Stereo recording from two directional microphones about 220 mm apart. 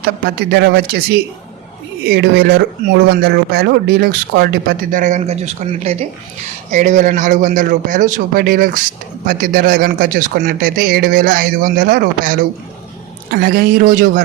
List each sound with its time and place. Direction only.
0.0 s speech: 45° right (ahead or behind)